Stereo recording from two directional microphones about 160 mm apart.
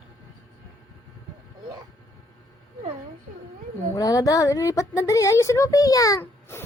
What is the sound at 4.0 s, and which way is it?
Speech, 20° left (ahead or behind).